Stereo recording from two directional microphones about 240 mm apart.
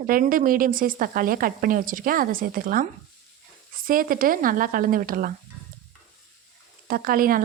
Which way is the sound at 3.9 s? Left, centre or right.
Right.